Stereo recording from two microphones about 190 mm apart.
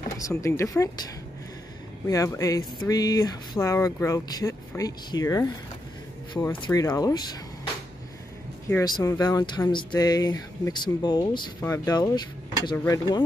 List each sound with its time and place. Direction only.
0.2 s speech: 15° left (ahead or behind)
2.0 s speech: 15° left (ahead or behind)
6.6 s speech: 20° left (ahead or behind)
8.6 s speech: 15° left (ahead or behind)